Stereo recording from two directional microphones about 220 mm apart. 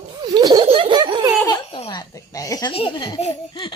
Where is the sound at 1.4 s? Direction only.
20° left (ahead or behind).